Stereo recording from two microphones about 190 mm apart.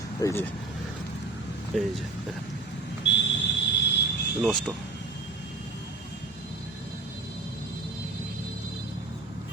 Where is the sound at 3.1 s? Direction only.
70° left (ahead or behind).